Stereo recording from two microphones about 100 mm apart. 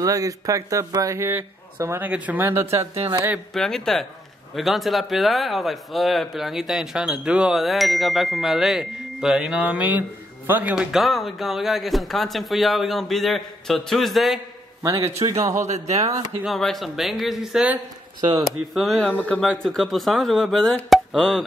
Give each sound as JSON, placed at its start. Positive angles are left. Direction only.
{"t": 0.0, "sound": "speech", "side_deg": -35}
{"t": 3.5, "sound": "speech", "side_deg": 5}
{"t": 10.7, "sound": "speech", "side_deg": -5}
{"t": 15.2, "sound": "a man's voice", "side_deg": -65}
{"t": 15.6, "sound": "speech", "side_deg": -90}
{"t": 16.4, "sound": "speech", "side_deg": 0}